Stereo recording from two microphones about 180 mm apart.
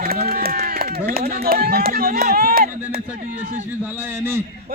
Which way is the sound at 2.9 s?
50° right (ahead or behind).